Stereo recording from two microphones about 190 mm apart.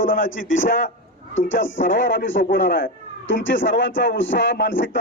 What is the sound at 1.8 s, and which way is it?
Speech, 45° left (ahead or behind).